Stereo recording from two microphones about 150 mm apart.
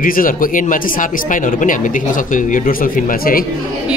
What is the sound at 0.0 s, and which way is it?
Speech, 70° left (ahead or behind).